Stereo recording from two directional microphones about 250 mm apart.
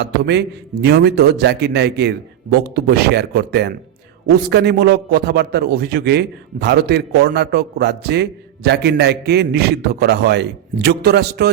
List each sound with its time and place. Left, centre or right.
0.0 s a man's voice: right